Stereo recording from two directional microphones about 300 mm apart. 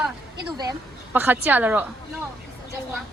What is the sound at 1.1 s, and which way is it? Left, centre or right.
Speech, centre.